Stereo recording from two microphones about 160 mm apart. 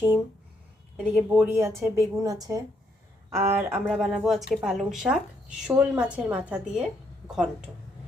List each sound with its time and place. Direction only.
0.9 s a woman's voice: 10° right (ahead or behind)